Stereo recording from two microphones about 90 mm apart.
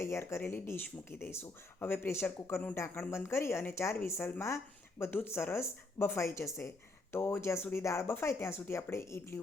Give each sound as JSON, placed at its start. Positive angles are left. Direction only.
{"t": 0.0, "sound": "speech", "side_deg": 30}